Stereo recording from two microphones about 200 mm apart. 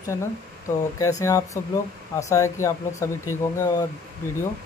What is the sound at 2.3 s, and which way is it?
Speech, 15° left (ahead or behind).